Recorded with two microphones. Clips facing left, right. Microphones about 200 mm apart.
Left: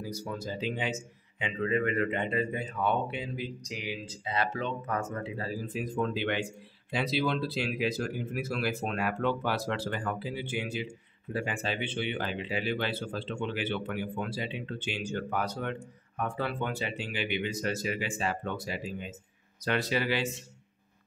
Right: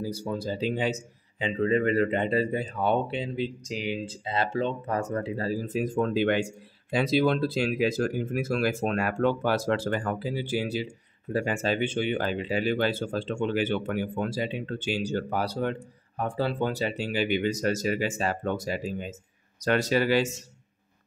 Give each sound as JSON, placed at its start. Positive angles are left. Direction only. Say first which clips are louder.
{"t": 0.0, "sound": "a man's voice", "louder": "right 6 dB", "side_deg": -30}